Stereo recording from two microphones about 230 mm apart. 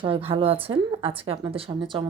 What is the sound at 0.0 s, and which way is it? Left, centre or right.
A woman's voice, right.